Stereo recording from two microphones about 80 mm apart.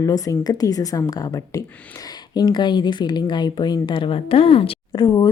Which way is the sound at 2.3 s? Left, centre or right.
Left.